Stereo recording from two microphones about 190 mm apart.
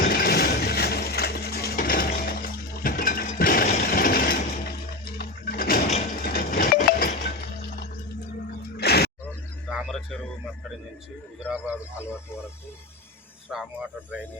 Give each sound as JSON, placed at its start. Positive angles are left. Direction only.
{"t": 0.0, "sound": "a sound", "side_deg": 55}
{"t": 6.2, "sound": "chink", "side_deg": 50}
{"t": 8.7, "sound": "music", "side_deg": 60}
{"t": 9.6, "sound": "a sound", "side_deg": 0}
{"t": 11.4, "sound": "a man's voice", "side_deg": -5}
{"t": 13.5, "sound": "speech", "side_deg": -5}